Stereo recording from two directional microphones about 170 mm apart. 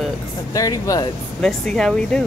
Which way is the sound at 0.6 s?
20° left (ahead or behind).